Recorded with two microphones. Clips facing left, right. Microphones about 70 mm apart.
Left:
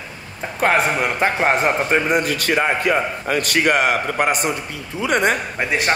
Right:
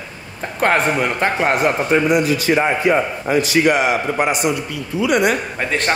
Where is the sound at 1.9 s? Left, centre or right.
Left.